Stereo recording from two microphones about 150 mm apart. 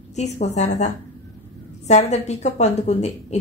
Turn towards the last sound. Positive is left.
turn(degrees=45)  # may be behind; listen again after turning